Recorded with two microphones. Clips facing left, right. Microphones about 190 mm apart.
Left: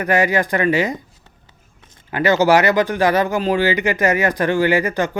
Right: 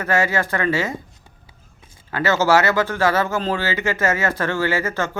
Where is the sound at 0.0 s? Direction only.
15° left (ahead or behind).